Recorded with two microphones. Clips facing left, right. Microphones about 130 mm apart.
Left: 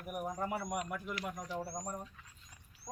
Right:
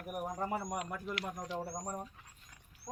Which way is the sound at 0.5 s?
20° right (ahead or behind).